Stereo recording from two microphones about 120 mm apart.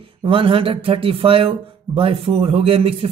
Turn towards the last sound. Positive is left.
turn(degrees=-50)  # may be behind; listen again after turning